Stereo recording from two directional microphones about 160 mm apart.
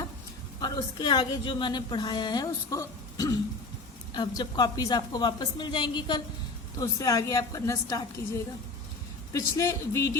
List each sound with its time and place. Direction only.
0.6 s a woman's voice: 25° left (ahead or behind)
9.3 s a woman's voice: 20° left (ahead or behind)